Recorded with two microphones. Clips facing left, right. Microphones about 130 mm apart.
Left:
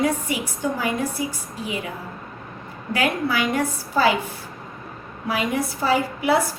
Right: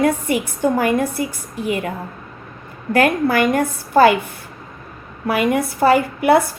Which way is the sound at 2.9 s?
50° right (ahead or behind).